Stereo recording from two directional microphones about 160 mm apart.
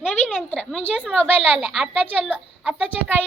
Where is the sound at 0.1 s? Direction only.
10° left (ahead or behind).